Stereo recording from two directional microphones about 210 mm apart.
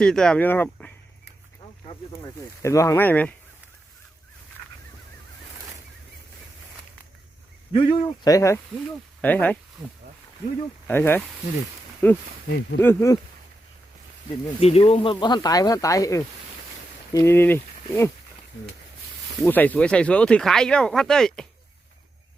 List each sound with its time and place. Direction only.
0.0 s speech: 5° left (ahead or behind)
2.6 s speech: 15° left (ahead or behind)
7.7 s speech: 25° left (ahead or behind); by 9.9 s centre (ahead or behind)
10.8 s speech: 10° left (ahead or behind)
14.6 s speech: 30° left (ahead or behind); by 18.1 s 10° left (ahead or behind)
19.4 s speech: 10° left (ahead or behind)